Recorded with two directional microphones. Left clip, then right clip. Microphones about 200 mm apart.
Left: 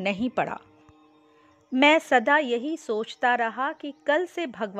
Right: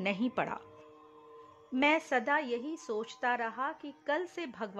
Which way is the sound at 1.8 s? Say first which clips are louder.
Left 10 dB; 35° left (ahead or behind).